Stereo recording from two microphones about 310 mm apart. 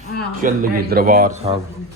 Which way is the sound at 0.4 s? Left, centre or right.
Right.